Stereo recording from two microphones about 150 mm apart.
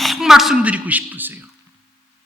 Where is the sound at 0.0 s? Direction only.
Centre (ahead or behind).